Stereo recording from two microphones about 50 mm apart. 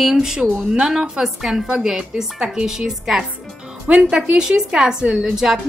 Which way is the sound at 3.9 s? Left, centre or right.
Right.